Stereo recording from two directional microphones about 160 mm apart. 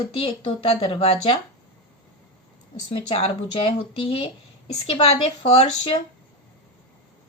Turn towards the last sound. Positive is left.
turn(degrees=40)  # may be behind; listen again after turning